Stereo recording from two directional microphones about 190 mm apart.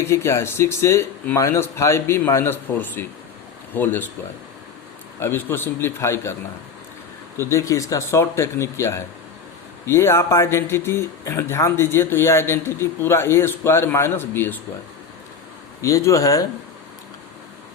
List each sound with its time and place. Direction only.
0.0 s speech: 15° left (ahead or behind)
5.2 s speech: 10° left (ahead or behind)
7.3 s speech: 15° left (ahead or behind)
15.8 s speech: 15° left (ahead or behind)